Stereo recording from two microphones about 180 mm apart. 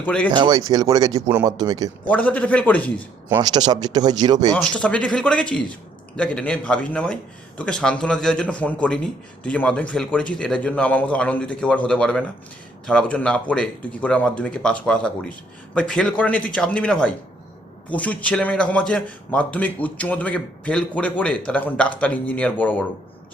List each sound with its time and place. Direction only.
0.0 s a man's voice: 5° left (ahead or behind)
0.3 s speech: 25° right (ahead or behind)
2.0 s a man's voice: 10° left (ahead or behind)
3.2 s speech: 20° right (ahead or behind)
4.5 s a man's voice: 5° left (ahead or behind)